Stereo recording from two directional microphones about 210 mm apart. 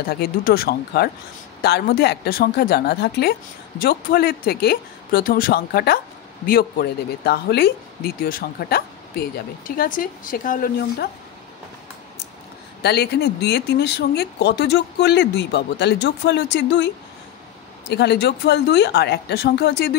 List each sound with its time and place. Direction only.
0.1 s speech: 45° left (ahead or behind)
12.8 s speech: 50° left (ahead or behind)